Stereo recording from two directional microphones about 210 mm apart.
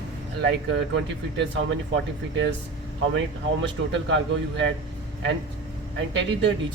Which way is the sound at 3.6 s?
60° right (ahead or behind).